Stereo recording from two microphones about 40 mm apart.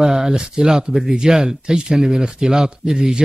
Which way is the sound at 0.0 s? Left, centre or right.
Centre.